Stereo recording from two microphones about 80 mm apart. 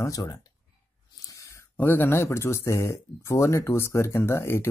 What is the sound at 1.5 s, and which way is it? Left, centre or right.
Speech, left.